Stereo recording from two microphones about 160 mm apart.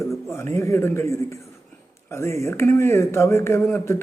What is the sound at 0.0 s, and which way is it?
Speech, 15° left (ahead or behind).